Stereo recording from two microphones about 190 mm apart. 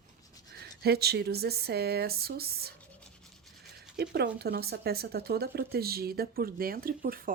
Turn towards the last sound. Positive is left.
turn(degrees=-50)  # may be behind; listen again after turning